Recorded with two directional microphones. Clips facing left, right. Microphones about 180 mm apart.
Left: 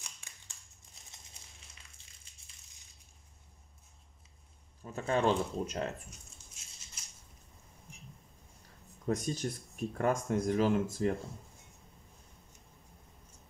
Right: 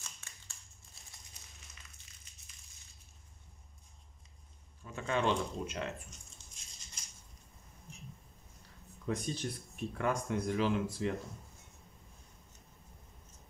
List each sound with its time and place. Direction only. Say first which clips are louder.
0.0 s a sound: even; 15° left (ahead or behind)
2.0 s crushing: right 1 dB; 30° left (ahead or behind)
4.8 s speech: left 3 dB; 40° left (ahead or behind)
6.0 s patter: left 1 dB; 5° left (ahead or behind)
9.0 s speech: left 3 dB; 45° left (ahead or behind)